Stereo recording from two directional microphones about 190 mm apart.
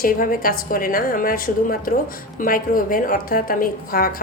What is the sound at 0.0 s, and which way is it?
A woman's voice, 50° left (ahead or behind).